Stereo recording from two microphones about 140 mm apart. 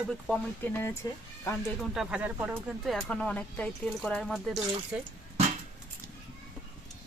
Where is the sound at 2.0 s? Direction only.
5° right (ahead or behind).